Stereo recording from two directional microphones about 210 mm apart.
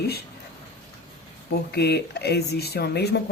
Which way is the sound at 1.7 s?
50° left (ahead or behind).